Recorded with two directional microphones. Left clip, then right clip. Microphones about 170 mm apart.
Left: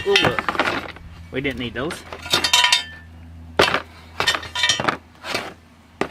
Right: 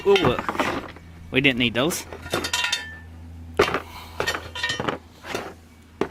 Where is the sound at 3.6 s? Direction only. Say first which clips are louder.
Left 4 dB; 30° left (ahead or behind).